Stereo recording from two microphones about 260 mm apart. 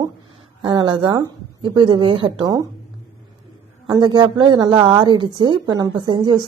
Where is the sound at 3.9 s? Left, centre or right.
Centre.